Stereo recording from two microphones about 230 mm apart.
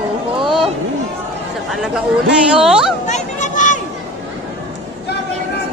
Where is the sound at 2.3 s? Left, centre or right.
Centre.